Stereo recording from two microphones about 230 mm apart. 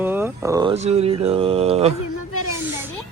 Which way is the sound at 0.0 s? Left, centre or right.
Centre.